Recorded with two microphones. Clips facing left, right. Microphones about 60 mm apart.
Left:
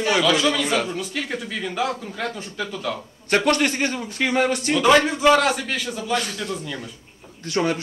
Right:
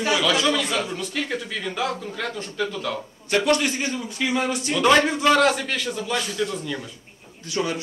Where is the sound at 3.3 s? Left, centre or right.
Left.